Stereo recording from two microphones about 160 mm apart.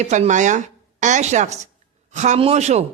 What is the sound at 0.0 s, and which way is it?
A woman's voice, 45° right (ahead or behind).